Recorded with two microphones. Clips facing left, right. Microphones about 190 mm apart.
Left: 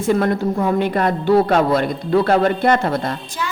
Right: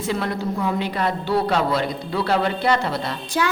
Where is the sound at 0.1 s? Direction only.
50° left (ahead or behind).